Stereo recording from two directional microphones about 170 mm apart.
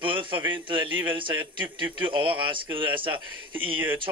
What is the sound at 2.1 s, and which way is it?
Speech, 30° right (ahead or behind).